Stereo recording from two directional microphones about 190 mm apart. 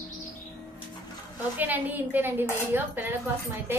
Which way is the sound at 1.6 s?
10° right (ahead or behind).